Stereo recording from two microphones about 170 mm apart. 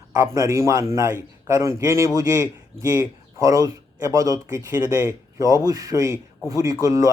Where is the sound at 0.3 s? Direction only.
20° right (ahead or behind).